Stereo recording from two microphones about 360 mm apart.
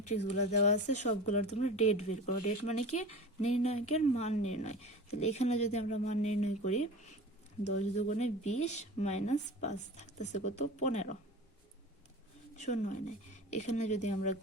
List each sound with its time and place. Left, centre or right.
0.3 s speech: centre
7.7 s speech: centre
12.5 s speech: centre